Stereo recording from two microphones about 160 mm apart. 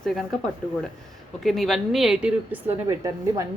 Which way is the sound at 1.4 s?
Centre (ahead or behind).